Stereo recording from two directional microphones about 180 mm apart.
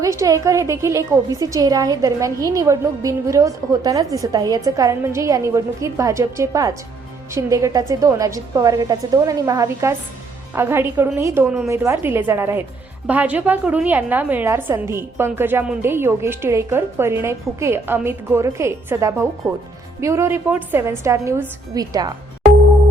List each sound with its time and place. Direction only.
0.0 s a woman's voice: 15° right (ahead or behind)